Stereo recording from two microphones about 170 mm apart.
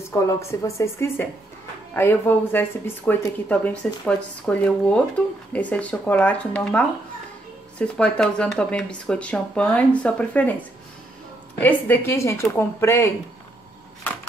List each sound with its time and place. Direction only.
0.1 s speech: 15° left (ahead or behind)
7.8 s speech: 5° left (ahead or behind)
11.6 s speech: 15° left (ahead or behind)